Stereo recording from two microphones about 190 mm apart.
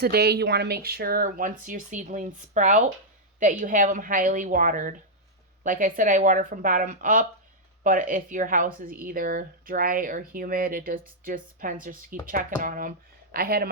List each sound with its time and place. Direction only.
0.0 s speech: 55° right (ahead or behind)